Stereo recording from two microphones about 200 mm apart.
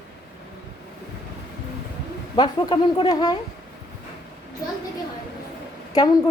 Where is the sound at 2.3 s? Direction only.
20° left (ahead or behind).